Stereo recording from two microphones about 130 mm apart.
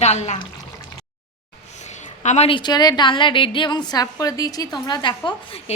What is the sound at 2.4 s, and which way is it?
A woman's voice, 35° left (ahead or behind).